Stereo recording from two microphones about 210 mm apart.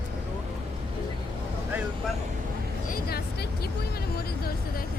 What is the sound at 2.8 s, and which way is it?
Vehicle, 40° left (ahead or behind).